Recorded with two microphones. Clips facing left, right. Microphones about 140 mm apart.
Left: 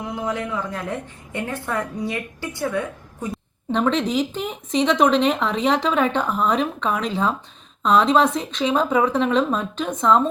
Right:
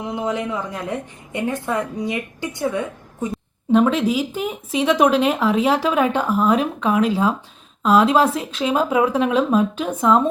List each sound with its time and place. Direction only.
0.0 s a woman's voice: 20° right (ahead or behind)
3.3 s speech: 5° right (ahead or behind)